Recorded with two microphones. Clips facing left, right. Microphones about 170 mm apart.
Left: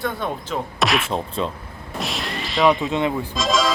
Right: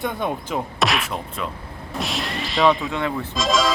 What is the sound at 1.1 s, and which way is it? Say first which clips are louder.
Speech: left 5 dB; 30° left (ahead or behind).